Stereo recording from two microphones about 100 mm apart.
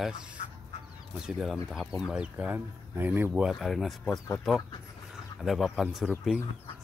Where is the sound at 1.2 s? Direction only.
Centre (ahead or behind); by 3.3 s 20° right (ahead or behind).